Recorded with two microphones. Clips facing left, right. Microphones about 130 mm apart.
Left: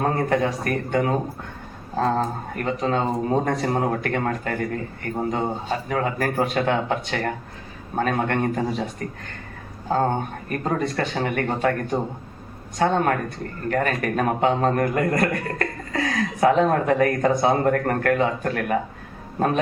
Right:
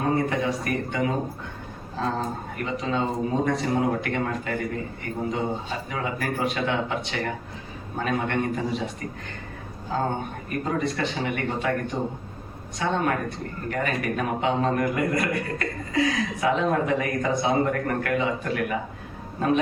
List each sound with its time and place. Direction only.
0.0 s a man's voice: 45° left (ahead or behind)
10.5 s a man's voice: 45° left (ahead or behind)